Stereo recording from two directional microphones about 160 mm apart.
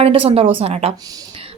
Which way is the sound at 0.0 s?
35° right (ahead or behind).